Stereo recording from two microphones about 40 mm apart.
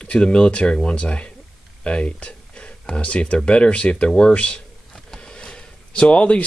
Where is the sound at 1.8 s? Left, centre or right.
Left.